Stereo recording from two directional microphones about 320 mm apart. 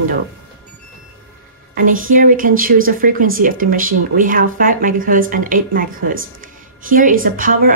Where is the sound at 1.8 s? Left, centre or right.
Right.